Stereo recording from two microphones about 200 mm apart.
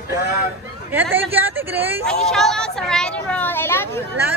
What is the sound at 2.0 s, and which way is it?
Speech, 5° left (ahead or behind).